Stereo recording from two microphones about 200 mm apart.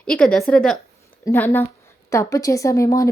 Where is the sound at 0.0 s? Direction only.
5° left (ahead or behind).